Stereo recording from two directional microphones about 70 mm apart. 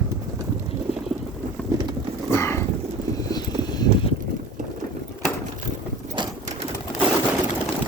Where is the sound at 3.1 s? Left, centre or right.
Left.